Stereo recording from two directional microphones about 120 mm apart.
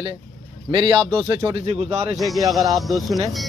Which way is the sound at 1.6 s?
60° right (ahead or behind).